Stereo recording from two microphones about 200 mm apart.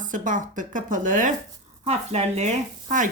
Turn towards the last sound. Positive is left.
turn(degrees=-40)  # may be behind; listen again after turning